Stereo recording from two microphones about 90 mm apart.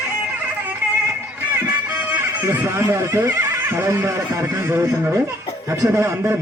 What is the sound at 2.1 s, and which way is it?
Speech, 25° right (ahead or behind).